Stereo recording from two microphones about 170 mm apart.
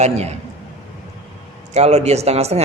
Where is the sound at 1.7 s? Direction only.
40° right (ahead or behind).